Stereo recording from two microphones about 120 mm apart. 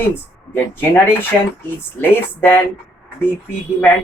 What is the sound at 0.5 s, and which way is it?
Speech, 15° left (ahead or behind).